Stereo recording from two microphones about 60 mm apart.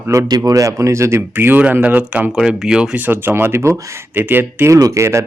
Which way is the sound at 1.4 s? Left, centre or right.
Right.